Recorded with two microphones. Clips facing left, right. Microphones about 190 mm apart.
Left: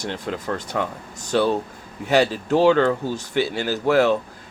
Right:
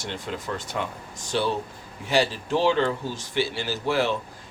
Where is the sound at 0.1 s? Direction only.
45° left (ahead or behind).